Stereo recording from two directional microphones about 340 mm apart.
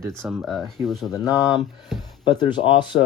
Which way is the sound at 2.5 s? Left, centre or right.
Centre.